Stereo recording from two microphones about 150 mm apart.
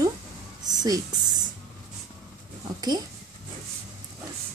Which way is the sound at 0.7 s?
25° right (ahead or behind).